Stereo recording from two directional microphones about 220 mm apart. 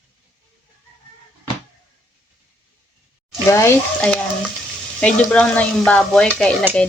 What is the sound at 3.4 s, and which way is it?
Speech, 10° left (ahead or behind).